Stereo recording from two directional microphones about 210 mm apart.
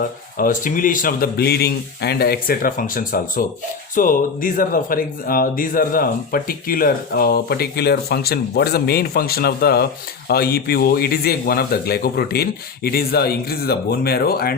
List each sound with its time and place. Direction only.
0.0 s speech: 40° left (ahead or behind)